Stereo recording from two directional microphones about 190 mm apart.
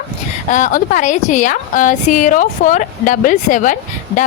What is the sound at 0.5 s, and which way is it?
A woman's voice, 45° left (ahead or behind).